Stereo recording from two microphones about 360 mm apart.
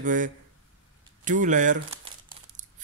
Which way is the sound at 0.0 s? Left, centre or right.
Right.